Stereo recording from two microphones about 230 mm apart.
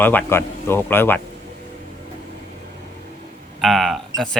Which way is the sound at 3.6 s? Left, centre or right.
Centre.